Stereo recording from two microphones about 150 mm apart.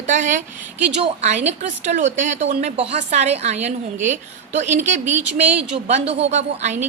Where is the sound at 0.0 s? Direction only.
55° right (ahead or behind).